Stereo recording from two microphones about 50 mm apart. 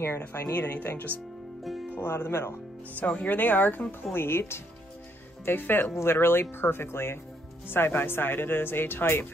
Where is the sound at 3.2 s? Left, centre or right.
Left.